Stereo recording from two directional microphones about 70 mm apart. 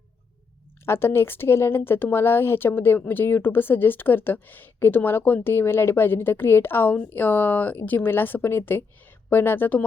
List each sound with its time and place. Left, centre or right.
0.9 s a woman's voice: left